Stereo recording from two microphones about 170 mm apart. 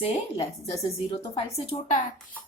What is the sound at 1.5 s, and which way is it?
Speech, 40° left (ahead or behind).